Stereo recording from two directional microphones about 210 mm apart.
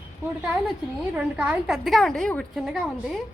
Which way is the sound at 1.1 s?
5° right (ahead or behind).